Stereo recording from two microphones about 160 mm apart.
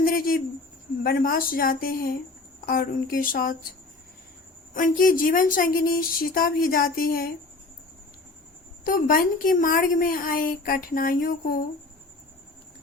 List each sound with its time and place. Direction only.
0.0 s a sound: 65° left (ahead or behind)
1.0 s a woman's voice: 65° left (ahead or behind)
4.7 s a woman's voice: 60° left (ahead or behind)
8.8 s a woman's voice: 60° left (ahead or behind)